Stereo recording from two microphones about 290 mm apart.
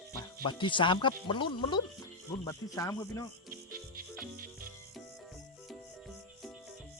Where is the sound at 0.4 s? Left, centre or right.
Centre.